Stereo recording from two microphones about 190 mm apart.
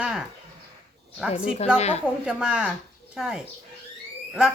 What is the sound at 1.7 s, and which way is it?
Speech, 35° left (ahead or behind).